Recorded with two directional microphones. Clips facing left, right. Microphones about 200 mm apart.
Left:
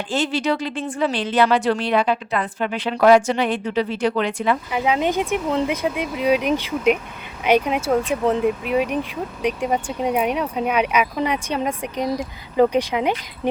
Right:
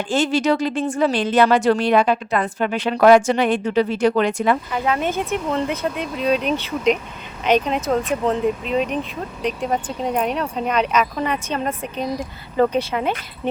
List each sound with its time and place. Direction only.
0.1 s speech: 45° right (ahead or behind)
4.7 s speech: 15° left (ahead or behind)